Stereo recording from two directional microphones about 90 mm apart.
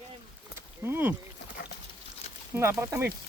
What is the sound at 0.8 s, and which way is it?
Speech, 20° right (ahead or behind).